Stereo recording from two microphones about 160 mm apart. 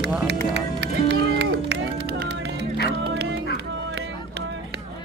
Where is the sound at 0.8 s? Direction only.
90° right.